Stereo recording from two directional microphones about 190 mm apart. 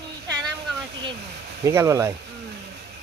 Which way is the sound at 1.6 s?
15° right (ahead or behind).